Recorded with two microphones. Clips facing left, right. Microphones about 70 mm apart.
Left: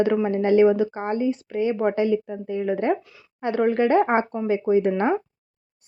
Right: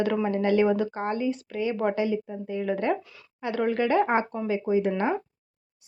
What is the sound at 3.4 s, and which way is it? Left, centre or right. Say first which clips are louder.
Speech: left 5 dB; left.